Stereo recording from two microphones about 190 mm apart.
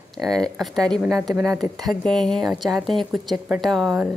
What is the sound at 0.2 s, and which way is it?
A woman's voice, centre (ahead or behind).